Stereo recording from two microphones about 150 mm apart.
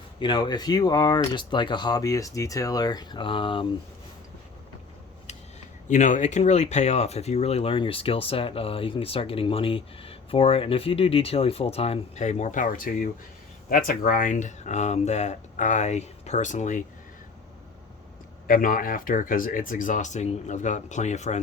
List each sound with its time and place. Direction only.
0.2 s speech: 30° left (ahead or behind)
5.9 s speech: 55° left (ahead or behind)
18.4 s speech: 65° left (ahead or behind); by 21.4 s 50° left (ahead or behind)